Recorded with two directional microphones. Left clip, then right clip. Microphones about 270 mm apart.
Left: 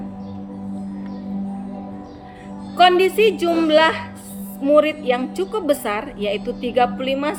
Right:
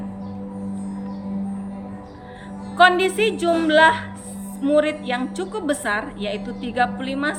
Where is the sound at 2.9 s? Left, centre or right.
Right.